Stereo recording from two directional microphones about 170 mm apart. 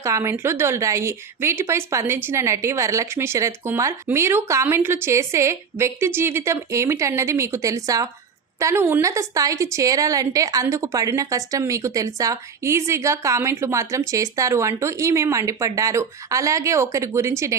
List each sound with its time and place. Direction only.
0.0 s a woman's voice: 15° right (ahead or behind)